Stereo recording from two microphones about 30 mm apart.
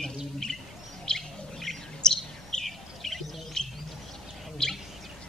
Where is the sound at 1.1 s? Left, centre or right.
Left.